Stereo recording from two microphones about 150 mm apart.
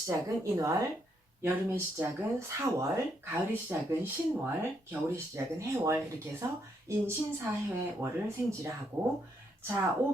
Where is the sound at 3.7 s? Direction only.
15° right (ahead or behind).